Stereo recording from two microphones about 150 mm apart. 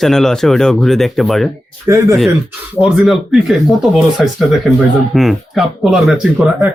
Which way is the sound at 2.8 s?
Centre (ahead or behind).